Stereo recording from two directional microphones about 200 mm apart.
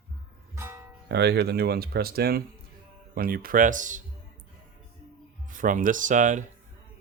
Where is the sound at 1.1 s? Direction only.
55° right (ahead or behind); by 4.0 s 40° right (ahead or behind).